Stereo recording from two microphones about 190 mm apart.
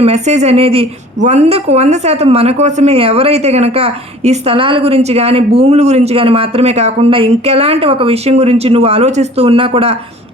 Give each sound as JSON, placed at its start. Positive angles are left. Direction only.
{"t": 0.0, "sound": "a woman's voice", "side_deg": -35}